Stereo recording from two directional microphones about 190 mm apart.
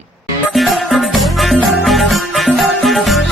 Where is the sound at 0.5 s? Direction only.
Centre (ahead or behind).